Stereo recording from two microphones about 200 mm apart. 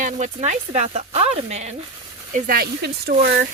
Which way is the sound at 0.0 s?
35° right (ahead or behind).